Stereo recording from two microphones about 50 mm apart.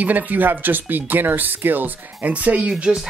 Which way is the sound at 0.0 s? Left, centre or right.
Right.